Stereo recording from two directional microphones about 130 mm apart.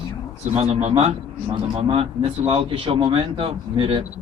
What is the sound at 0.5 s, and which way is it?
A man's voice, 50° right (ahead or behind).